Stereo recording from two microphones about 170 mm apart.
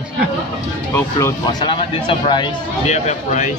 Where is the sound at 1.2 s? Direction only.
20° left (ahead or behind).